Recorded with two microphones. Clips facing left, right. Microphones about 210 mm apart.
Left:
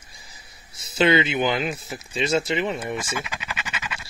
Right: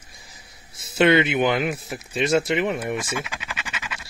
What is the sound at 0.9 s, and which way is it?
Speech, 60° right (ahead or behind).